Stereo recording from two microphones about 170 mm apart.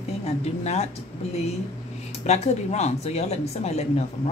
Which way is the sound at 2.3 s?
40° left (ahead or behind).